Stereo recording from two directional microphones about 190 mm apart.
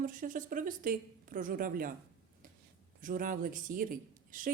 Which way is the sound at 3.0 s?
45° right (ahead or behind).